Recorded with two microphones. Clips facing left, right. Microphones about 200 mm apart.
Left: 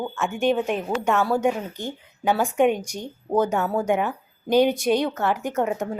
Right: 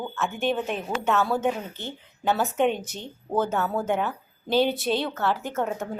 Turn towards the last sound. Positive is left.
turn(degrees=15)  # may be behind; listen again after turning